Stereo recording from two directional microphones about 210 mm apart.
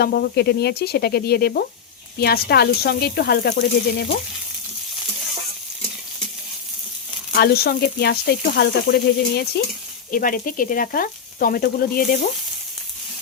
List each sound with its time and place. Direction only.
0.0 s frying: 50° left (ahead or behind)
7.3 s frying: 50° left (ahead or behind)